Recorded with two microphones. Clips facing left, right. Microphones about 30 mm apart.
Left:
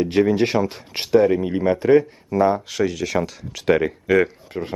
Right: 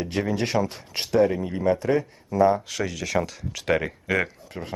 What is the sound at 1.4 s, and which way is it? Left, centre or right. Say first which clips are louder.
Speech: left 4 dB; left.